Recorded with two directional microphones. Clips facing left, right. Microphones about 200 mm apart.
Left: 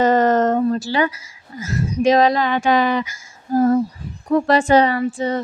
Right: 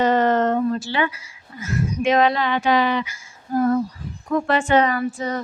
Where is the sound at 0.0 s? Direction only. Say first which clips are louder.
Left 3 dB; 45° left (ahead or behind).